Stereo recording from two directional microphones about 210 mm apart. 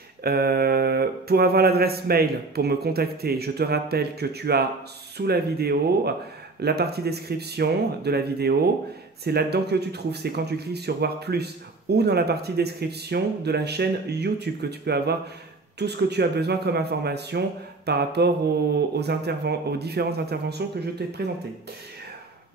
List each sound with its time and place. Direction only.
0.2 s speech: 45° right (ahead or behind)